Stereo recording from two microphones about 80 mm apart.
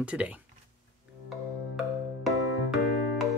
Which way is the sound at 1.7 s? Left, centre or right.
Centre.